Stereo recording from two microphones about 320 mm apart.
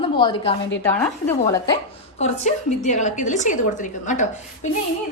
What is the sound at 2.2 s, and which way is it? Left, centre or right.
A woman's voice, left.